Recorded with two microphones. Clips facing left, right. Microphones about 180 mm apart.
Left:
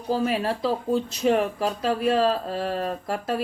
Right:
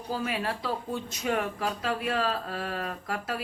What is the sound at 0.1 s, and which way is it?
Speech, 35° left (ahead or behind).